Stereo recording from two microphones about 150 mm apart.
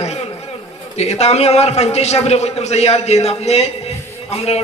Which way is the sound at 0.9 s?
45° left (ahead or behind).